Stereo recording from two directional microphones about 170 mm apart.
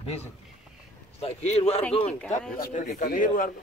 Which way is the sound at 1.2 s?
35° left (ahead or behind).